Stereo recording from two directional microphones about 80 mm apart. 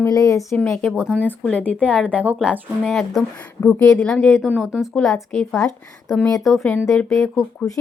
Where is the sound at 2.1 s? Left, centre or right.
Centre.